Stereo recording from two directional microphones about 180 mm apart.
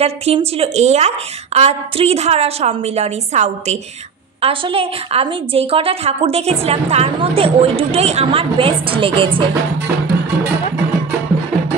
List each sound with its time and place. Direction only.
0.0 s a woman's voice: 35° right (ahead or behind)